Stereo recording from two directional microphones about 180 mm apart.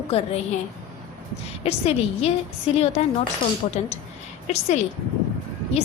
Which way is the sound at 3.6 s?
35° left (ahead or behind).